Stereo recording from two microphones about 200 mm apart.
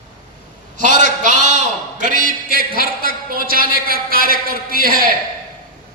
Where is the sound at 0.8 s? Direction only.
40° right (ahead or behind).